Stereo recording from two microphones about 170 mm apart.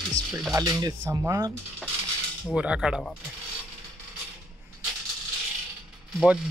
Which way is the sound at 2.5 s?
5° right (ahead or behind).